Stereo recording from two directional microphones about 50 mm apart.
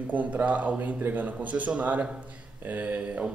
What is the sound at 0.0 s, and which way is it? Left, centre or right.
A man's voice, right.